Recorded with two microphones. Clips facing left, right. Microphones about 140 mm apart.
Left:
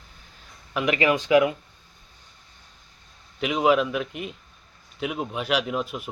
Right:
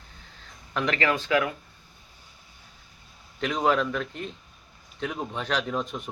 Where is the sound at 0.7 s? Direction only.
10° left (ahead or behind).